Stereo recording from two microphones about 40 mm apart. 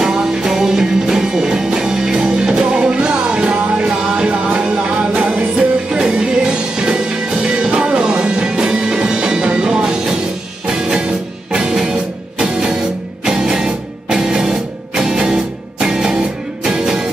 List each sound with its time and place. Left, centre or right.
0.0 s music: centre; by 5.4 s right
5.6 s music: right
11.5 s music: right